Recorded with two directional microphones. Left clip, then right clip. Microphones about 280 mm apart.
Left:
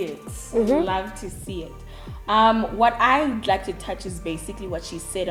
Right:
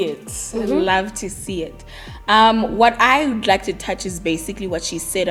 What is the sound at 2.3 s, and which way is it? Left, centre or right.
Speech, right.